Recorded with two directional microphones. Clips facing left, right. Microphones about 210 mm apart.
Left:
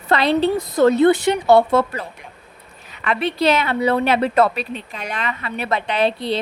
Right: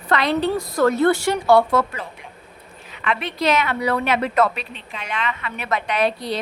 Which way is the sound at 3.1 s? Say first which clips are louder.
Left 3 dB; 30° left (ahead or behind).